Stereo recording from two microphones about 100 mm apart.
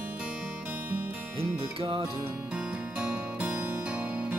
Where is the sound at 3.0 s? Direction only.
15° right (ahead or behind).